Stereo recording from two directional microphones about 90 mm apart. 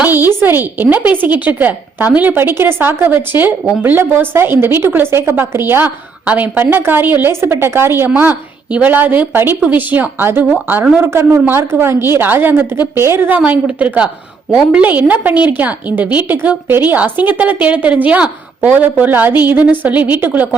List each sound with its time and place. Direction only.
0.0 s a woman's voice: 25° right (ahead or behind)
11.0 s a woman's voice: 25° right (ahead or behind)